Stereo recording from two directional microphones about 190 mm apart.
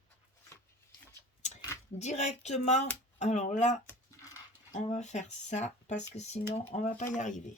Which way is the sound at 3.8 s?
15° left (ahead or behind).